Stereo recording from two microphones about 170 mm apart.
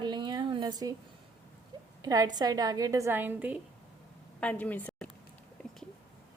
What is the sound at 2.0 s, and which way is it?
A woman's voice, 20° right (ahead or behind).